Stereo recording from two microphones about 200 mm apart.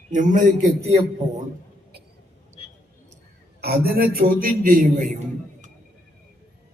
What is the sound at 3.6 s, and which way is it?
A man's voice, 50° right (ahead or behind).